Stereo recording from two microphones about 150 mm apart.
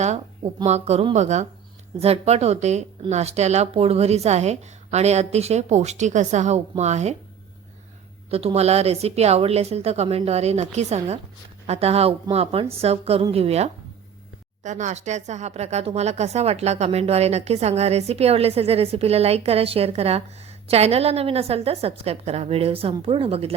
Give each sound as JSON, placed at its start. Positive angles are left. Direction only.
{"t": 0.6, "sound": "a woman's voice", "side_deg": -45}
{"t": 8.3, "sound": "a woman's voice", "side_deg": -40}
{"t": 14.6, "sound": "a woman's voice", "side_deg": -55}